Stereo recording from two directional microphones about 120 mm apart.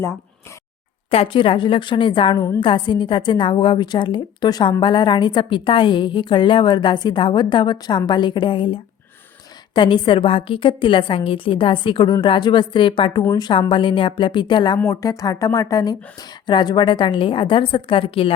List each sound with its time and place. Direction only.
1.1 s a woman's voice: 50° left (ahead or behind)
14.8 s a woman's voice: 30° left (ahead or behind); by 18.3 s 50° left (ahead or behind)